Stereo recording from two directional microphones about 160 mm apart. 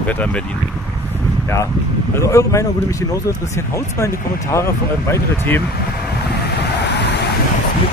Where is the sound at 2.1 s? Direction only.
20° left (ahead or behind).